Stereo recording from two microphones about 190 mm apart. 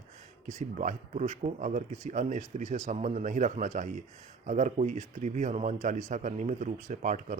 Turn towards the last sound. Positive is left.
turn(degrees=-40)  # may be behind; listen again after turning